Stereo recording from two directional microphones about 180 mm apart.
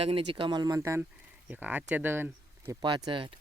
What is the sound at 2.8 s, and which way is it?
Speech, 25° right (ahead or behind).